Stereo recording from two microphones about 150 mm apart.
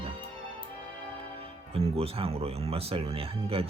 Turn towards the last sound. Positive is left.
turn(degrees=-40)  # may be behind; listen again after turning